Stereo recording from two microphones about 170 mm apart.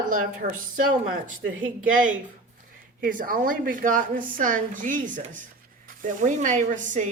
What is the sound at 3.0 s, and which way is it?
A woman's voice, 55° right (ahead or behind).